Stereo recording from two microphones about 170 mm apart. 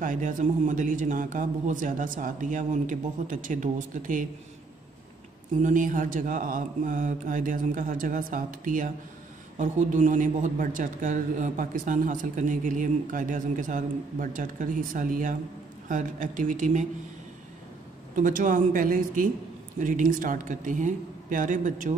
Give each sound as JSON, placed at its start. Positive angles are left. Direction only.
{"t": 0.0, "sound": "a man's voice", "side_deg": -50}
{"t": 5.6, "sound": "a man's voice", "side_deg": -50}
{"t": 18.1, "sound": "a man's voice", "side_deg": -50}